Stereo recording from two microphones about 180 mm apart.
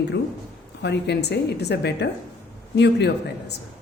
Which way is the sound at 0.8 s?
70° left (ahead or behind).